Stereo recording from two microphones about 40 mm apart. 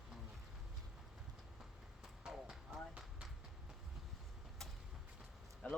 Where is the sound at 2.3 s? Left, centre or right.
Centre.